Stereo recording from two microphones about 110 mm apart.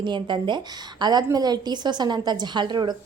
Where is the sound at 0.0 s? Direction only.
45° right (ahead or behind).